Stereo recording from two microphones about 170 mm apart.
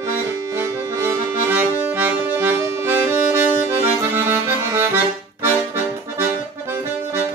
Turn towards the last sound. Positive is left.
turn(degrees=-15)  # may be behind; listen again after turning